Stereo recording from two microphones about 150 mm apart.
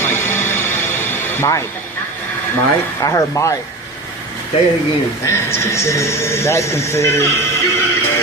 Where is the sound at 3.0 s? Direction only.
20° left (ahead or behind).